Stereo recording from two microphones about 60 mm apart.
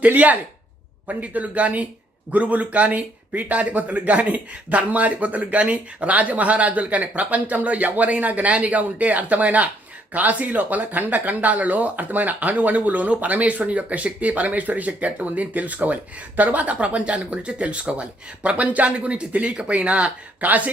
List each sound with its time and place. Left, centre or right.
0.0 s speech: right